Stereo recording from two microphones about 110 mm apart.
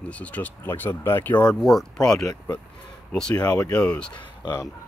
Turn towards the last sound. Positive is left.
turn(degrees=40)  # may be behind; listen again after turning